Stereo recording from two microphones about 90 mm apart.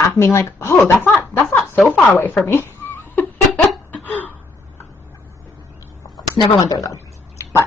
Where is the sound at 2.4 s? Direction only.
25° left (ahead or behind).